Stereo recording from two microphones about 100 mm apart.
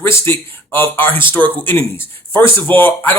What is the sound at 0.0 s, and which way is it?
A man's voice, 25° left (ahead or behind).